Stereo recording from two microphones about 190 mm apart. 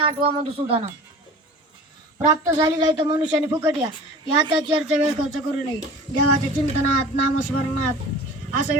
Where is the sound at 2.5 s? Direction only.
20° right (ahead or behind).